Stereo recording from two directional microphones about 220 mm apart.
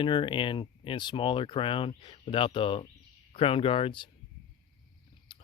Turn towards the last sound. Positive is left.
turn(degrees=25)  # may be behind; listen again after turning